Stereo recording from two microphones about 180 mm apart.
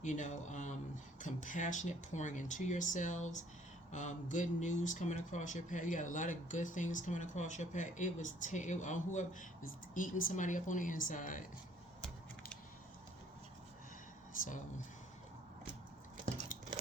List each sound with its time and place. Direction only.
0.0 s a man's voice: 45° left (ahead or behind)